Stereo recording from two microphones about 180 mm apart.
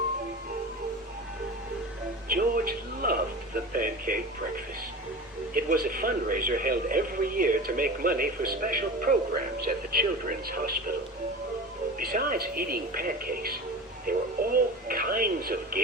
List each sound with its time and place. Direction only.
2.3 s speech: 55° right (ahead or behind)
5.5 s speech: 50° right (ahead or behind)
11.9 s speech: 50° right (ahead or behind)
14.1 s radio: 50° right (ahead or behind)